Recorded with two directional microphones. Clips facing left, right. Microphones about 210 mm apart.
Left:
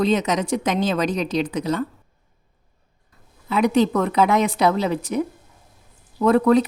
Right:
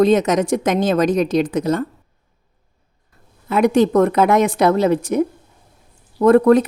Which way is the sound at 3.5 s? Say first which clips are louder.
Right 4 dB; 50° right (ahead or behind).